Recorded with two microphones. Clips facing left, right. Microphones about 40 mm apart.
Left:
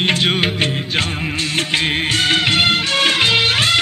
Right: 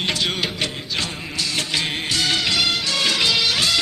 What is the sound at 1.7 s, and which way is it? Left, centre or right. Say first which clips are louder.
Music of bollywood: left 6 dB; left.